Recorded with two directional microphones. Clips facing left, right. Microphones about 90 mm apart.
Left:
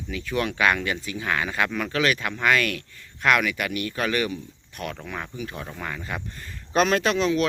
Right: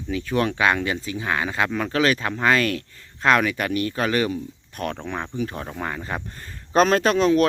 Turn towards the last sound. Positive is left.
turn(degrees=-40)  # may be behind; listen again after turning